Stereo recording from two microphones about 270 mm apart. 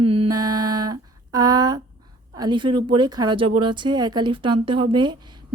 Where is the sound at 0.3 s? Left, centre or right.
Centre.